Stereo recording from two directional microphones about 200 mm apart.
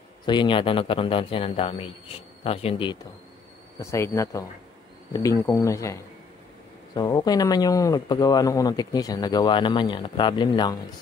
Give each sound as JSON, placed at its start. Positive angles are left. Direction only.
{"t": 0.2, "sound": "speech", "side_deg": 25}
{"t": 3.8, "sound": "speech", "side_deg": 15}